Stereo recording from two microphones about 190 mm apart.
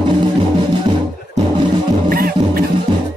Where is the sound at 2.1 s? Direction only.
50° right (ahead or behind).